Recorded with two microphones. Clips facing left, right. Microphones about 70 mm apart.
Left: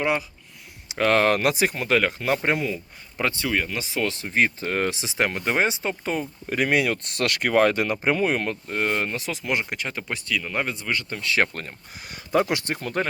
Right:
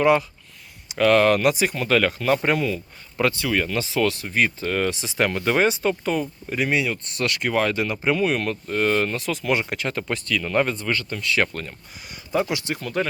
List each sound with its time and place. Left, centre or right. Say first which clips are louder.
0.0 s speech: right 6 dB; centre
0.9 s speech: right 3 dB; left
6.5 s speech: left 2 dB; left; by 11.0 s centre
11.1 s speech: left 2 dB; left
12.3 s speech: left 1 dB; left